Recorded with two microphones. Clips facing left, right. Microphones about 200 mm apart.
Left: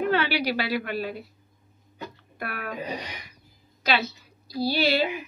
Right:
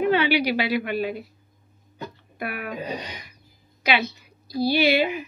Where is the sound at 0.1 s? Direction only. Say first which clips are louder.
Right 4 dB; 15° right (ahead or behind).